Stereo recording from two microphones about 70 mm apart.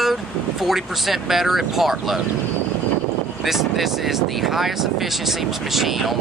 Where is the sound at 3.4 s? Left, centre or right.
Centre.